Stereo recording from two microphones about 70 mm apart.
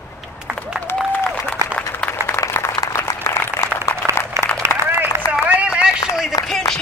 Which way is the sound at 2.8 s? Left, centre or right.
Left.